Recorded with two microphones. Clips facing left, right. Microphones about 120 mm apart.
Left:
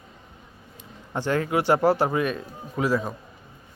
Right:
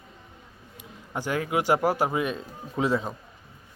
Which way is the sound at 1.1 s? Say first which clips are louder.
Left 3 dB; 10° right (ahead or behind).